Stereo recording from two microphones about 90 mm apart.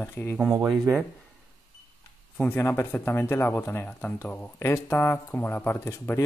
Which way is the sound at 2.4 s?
20° left (ahead or behind).